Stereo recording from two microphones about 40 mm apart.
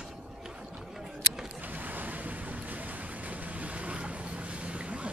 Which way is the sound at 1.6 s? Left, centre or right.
Right.